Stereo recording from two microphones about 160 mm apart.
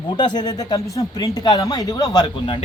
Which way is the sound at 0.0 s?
30° left (ahead or behind).